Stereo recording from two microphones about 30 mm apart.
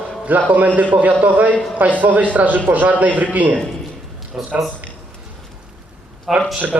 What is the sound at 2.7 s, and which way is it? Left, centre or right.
Speech, right.